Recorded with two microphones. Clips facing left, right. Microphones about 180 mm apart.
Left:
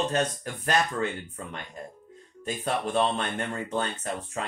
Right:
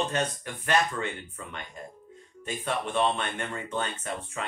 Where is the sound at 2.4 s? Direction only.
35° left (ahead or behind).